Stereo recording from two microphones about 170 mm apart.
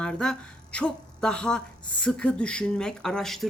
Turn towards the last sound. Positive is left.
turn(degrees=0)  # may be behind; listen again after turning